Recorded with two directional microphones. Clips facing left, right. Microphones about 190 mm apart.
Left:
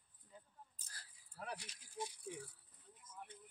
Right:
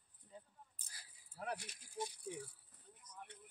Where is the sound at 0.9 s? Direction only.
10° right (ahead or behind).